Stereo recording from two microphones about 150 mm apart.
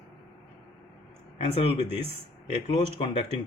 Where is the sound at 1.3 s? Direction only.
45° left (ahead or behind).